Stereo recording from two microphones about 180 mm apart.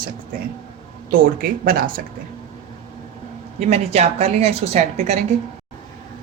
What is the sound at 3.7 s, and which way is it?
A woman's voice, 35° right (ahead or behind).